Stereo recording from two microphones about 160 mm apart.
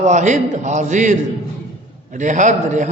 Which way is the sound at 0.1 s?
50° right (ahead or behind).